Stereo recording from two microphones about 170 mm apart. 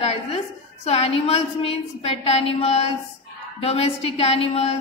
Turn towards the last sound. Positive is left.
turn(degrees=35)  # may be behind; listen again after turning